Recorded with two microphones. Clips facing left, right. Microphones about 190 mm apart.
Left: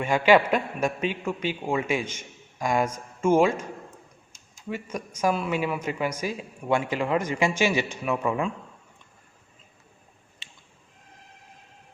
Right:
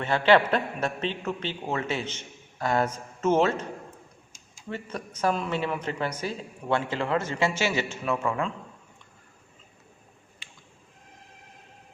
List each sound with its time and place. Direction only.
0.0 s a man's voice: 10° left (ahead or behind)
4.7 s a man's voice: 10° left (ahead or behind)
10.4 s a sound: 25° left (ahead or behind)